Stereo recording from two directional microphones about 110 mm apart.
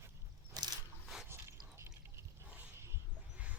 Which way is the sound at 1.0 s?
5° right (ahead or behind).